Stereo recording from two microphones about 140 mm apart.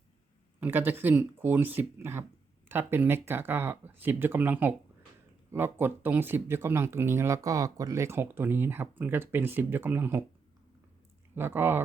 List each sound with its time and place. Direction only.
0.6 s speech: 15° right (ahead or behind)
11.3 s speech: 15° right (ahead or behind)